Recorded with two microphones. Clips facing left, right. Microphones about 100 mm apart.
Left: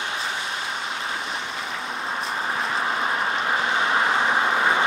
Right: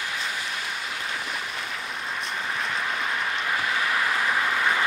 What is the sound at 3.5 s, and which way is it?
Vehicle, 25° left (ahead or behind).